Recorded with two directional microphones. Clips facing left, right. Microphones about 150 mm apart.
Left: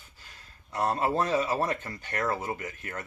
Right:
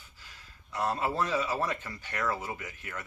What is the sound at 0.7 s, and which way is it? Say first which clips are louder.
Speech: left 3 dB; 45° left (ahead or behind).